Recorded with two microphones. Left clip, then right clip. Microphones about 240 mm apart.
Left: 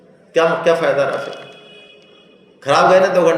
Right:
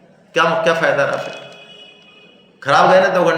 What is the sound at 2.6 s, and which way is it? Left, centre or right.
Speech, right.